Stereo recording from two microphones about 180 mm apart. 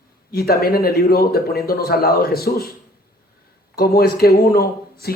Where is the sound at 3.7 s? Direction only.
60° left (ahead or behind).